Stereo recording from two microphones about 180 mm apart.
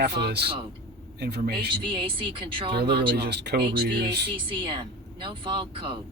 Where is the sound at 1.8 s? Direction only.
25° right (ahead or behind).